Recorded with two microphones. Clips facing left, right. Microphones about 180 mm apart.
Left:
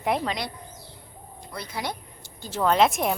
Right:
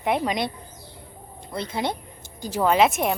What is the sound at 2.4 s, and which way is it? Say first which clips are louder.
Speech: right 2 dB; 10° right (ahead or behind).